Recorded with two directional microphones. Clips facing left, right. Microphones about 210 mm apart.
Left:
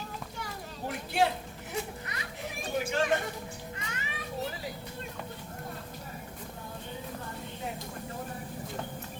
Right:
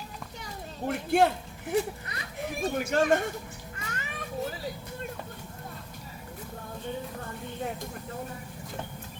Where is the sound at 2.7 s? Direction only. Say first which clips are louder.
Right 3 dB; 50° right (ahead or behind).